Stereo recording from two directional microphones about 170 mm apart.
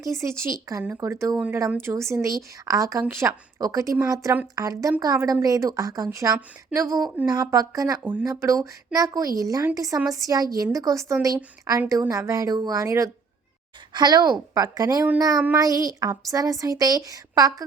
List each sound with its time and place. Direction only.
0.0 s speech: 15° right (ahead or behind)